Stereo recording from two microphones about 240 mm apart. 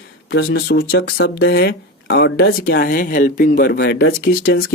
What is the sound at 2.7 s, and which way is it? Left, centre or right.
Speech, left.